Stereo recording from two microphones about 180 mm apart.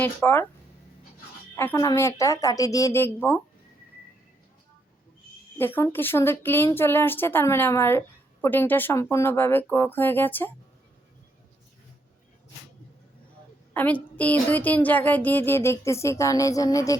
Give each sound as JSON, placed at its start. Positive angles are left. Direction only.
{"t": 0.0, "sound": "a woman's voice", "side_deg": 10}
{"t": 1.5, "sound": "a woman's voice", "side_deg": 15}
{"t": 5.5, "sound": "a woman's voice", "side_deg": 10}
{"t": 13.7, "sound": "a woman's voice", "side_deg": 10}